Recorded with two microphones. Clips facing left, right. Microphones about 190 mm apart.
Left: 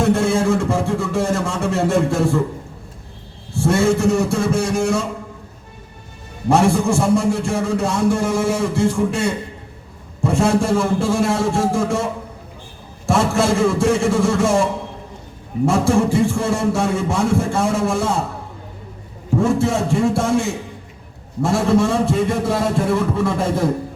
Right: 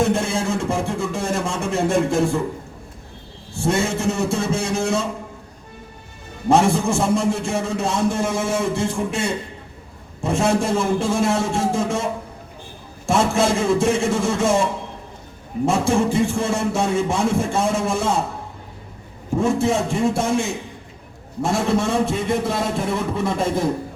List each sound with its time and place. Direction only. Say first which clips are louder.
0.0 s a sound: left 4 dB; 15° right (ahead or behind)
3.5 s a man's voice: left 5 dB; 15° right (ahead or behind)
6.5 s a man's voice: left 1 dB; 20° right (ahead or behind)
10.2 s a man's voice: left 3 dB; 20° right (ahead or behind)
13.1 s a man's voice: left 1 dB; 20° right (ahead or behind)
15.6 s a man's voice: left 2 dB; 20° right (ahead or behind)
19.4 s a man's voice: left 1 dB; 15° right (ahead or behind)
21.4 s a man's voice: left 4 dB; 20° right (ahead or behind)